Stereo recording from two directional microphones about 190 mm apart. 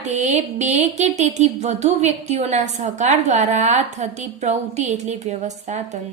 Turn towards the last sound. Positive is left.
turn(degrees=-35)  # may be behind; listen again after turning